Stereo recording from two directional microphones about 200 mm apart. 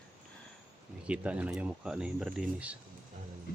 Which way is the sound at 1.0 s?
5° right (ahead or behind).